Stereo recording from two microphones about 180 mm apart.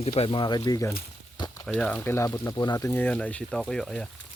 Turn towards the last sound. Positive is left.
turn(degrees=5)  # may be behind; listen again after turning